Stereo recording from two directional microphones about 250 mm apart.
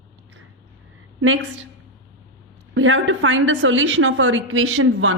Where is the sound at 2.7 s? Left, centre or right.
Right.